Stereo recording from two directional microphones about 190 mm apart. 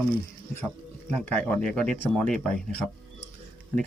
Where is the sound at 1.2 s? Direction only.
5° left (ahead or behind).